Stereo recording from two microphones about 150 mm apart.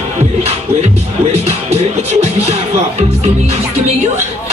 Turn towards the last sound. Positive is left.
turn(degrees=-45)  # may be behind; listen again after turning